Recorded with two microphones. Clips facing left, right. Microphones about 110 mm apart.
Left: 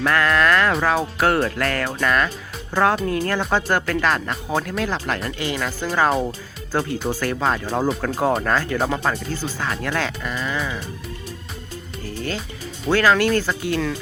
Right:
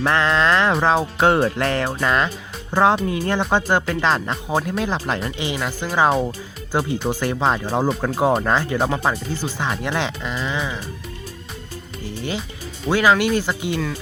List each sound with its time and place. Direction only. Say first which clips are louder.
0.0 s speech: even; 25° right (ahead or behind)
12.0 s speech: right 1 dB; 15° right (ahead or behind)